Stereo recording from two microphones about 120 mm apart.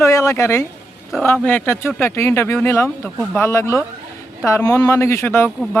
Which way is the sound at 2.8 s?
Centre (ahead or behind).